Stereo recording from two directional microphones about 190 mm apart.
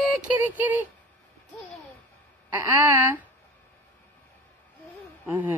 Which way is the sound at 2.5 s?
15° right (ahead or behind).